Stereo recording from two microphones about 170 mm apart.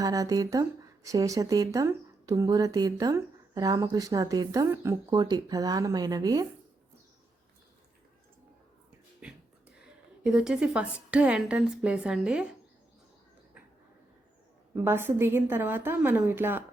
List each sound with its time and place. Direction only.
0.0 s speech: 20° right (ahead or behind)
10.2 s a woman's voice: 5° right (ahead or behind)
14.8 s a woman's voice: 15° right (ahead or behind)